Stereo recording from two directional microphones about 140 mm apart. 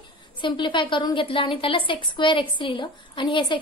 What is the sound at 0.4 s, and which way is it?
A woman's voice, 35° left (ahead or behind).